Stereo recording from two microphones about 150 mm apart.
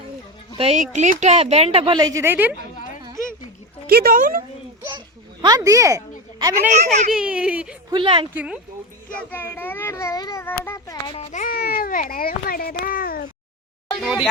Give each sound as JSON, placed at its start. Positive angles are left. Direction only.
{"t": 0.5, "sound": "speech", "side_deg": -40}
{"t": 0.8, "sound": "speech", "side_deg": -50}
{"t": 3.8, "sound": "speech", "side_deg": -90}
{"t": 4.9, "sound": "a sound", "side_deg": -30}
{"t": 6.4, "sound": "a woman's voice", "side_deg": -20}
{"t": 7.1, "sound": "speech", "side_deg": -5}
{"t": 7.9, "sound": "speech", "side_deg": -35}
{"t": 8.3, "sound": "speech", "side_deg": -10}
{"t": 9.3, "sound": "a child's voice", "side_deg": 10}
{"t": 11.0, "sound": "a child's voice", "side_deg": 40}
{"t": 11.5, "sound": "a child's voice", "side_deg": 80}
{"t": 14.0, "sound": "speech", "side_deg": -5}